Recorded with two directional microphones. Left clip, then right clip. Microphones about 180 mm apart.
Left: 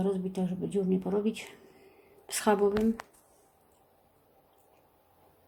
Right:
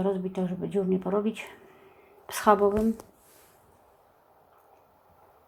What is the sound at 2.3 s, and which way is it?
Speech, 10° left (ahead or behind).